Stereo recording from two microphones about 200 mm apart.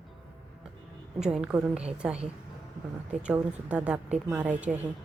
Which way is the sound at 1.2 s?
5° right (ahead or behind).